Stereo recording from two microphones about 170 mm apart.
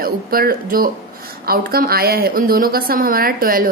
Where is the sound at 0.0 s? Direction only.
60° right (ahead or behind).